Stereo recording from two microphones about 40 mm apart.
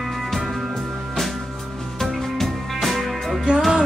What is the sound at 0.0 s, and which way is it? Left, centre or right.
Music, centre.